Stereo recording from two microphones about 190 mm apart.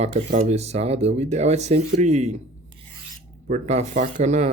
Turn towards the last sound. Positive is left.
turn(degrees=-35)  # may be behind; listen again after turning